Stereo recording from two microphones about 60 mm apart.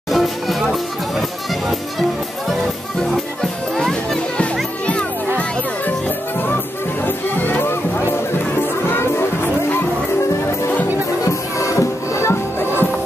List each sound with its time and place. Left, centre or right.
0.1 s music: centre
1.7 s music: centre
3.7 s music: centre
7.1 s music: left
11.2 s music: left